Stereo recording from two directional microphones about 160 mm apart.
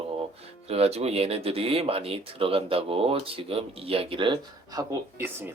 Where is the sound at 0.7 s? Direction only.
40° right (ahead or behind).